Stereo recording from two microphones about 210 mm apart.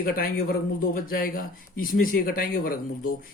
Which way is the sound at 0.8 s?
45° left (ahead or behind).